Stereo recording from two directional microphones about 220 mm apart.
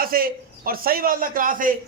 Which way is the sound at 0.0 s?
40° right (ahead or behind).